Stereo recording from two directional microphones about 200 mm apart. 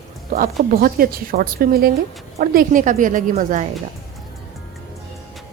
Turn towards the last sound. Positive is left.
turn(degrees=-40)  # may be behind; listen again after turning